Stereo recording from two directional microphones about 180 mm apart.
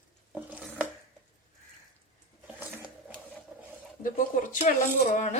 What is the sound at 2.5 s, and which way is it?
Sewing machine, 10° right (ahead or behind).